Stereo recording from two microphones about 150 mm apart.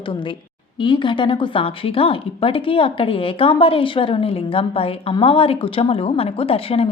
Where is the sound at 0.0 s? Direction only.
35° left (ahead or behind).